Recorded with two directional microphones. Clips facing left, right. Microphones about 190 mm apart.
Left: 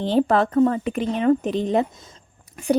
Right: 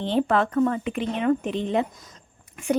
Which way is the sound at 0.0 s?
35° left (ahead or behind).